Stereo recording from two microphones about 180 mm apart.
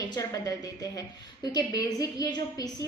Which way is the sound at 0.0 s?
20° left (ahead or behind).